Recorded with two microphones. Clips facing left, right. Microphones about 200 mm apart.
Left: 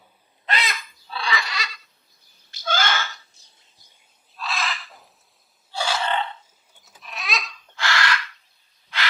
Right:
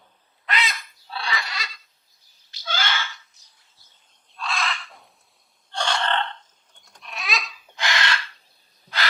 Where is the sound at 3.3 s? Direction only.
25° left (ahead or behind).